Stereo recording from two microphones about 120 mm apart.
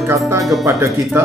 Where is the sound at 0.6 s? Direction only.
20° right (ahead or behind).